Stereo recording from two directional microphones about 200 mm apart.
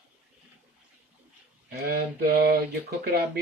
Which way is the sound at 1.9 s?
50° right (ahead or behind).